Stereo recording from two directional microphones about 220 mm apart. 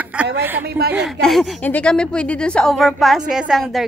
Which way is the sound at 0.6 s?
45° right (ahead or behind).